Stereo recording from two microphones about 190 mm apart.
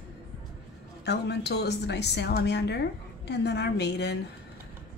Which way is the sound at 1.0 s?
60° left (ahead or behind).